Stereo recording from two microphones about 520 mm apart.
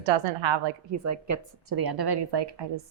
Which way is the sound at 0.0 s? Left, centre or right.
Right.